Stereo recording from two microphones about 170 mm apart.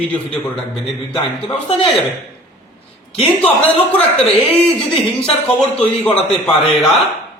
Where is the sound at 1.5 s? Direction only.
35° left (ahead or behind).